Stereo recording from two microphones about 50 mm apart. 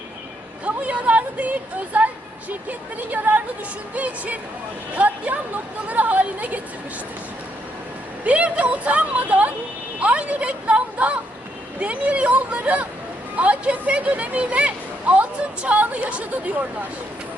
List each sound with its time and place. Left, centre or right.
0.6 s a woman's voice: right
8.2 s speech: right